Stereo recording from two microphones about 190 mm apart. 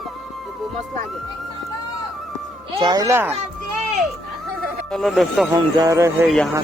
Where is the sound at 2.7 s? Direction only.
25° right (ahead or behind).